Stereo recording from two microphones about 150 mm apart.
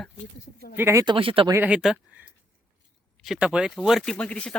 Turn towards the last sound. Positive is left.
turn(degrees=10)  # may be behind; listen again after turning